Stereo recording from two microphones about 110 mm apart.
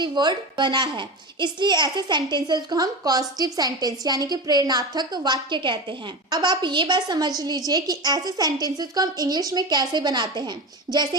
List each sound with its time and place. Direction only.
0.0 s a woman's voice: 40° right (ahead or behind)